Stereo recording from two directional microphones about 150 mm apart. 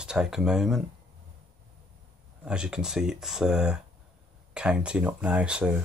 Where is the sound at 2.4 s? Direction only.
5° right (ahead or behind).